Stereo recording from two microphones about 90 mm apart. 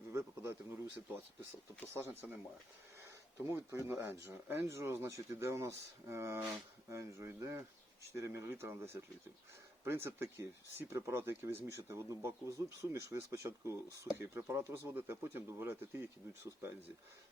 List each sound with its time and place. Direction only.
0.1 s a sound: 30° right (ahead or behind)
0.9 s speech: 25° right (ahead or behind)
3.5 s speech: 25° right (ahead or behind)